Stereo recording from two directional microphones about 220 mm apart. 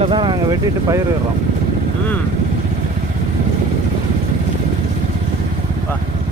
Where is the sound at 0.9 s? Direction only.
15° right (ahead or behind).